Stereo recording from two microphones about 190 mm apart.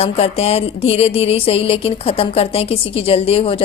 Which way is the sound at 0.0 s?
35° left (ahead or behind).